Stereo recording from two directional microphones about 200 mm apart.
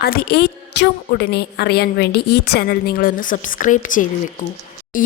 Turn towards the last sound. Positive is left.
turn(degrees=45)  # may be behind; listen again after turning